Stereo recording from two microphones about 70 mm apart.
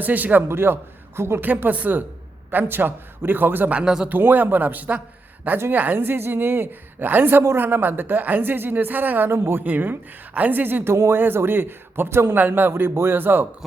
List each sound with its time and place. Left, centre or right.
0.0 s a woman's voice: right
1.5 s a woman's voice: right
3.8 s speech: centre
4.1 s a woman's voice: right
10.9 s a man's voice: right